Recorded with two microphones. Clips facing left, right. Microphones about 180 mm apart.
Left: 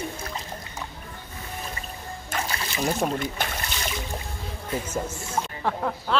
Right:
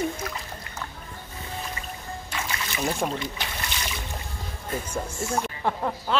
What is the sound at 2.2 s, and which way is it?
Music, 40° left (ahead or behind).